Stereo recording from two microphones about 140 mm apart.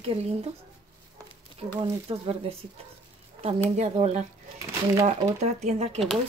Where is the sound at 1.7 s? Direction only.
40° right (ahead or behind).